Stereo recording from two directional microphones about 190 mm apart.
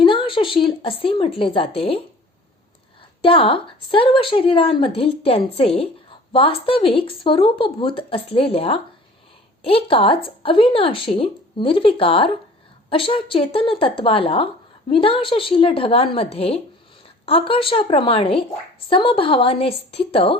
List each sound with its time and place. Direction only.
0.0 s a woman's voice: 25° left (ahead or behind)
3.2 s a woman's voice: 30° left (ahead or behind)